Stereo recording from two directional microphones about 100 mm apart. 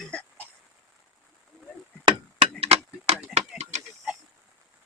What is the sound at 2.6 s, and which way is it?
Tick-tock, 90° right.